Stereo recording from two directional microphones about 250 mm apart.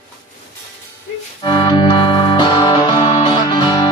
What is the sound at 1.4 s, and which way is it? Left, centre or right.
Organ, left.